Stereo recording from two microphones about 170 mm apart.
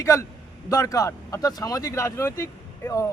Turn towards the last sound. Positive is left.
turn(degrees=15)  # may be behind; listen again after turning